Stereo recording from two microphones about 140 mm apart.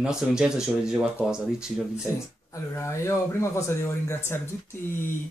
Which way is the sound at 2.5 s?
20° left (ahead or behind).